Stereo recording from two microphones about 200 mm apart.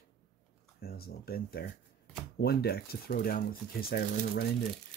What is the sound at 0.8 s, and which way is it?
Speech, 50° left (ahead or behind).